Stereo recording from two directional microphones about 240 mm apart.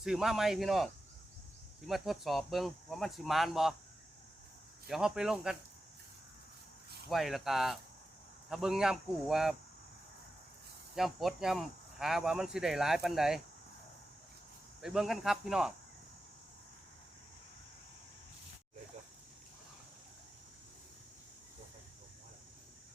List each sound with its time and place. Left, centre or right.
0.0 s speech: centre
1.9 s speech: centre
4.9 s speech: centre
7.1 s speech: centre
10.9 s speech: centre
14.8 s speech: centre